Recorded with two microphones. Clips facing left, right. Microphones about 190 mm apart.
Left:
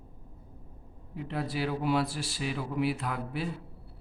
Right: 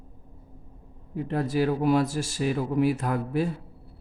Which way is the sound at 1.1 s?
45° right (ahead or behind).